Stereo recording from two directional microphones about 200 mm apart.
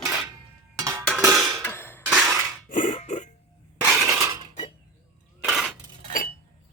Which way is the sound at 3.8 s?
15° right (ahead or behind).